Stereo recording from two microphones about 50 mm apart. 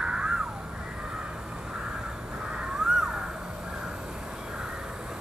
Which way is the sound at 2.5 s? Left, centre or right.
Centre.